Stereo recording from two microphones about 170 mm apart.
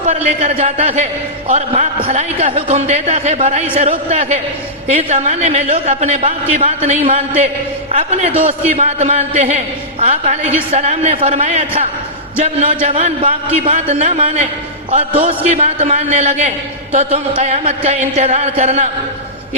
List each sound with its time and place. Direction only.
0.0 s a man's voice: 40° right (ahead or behind)
11.3 s speech: 50° right (ahead or behind)
12.4 s a man's voice: 40° right (ahead or behind)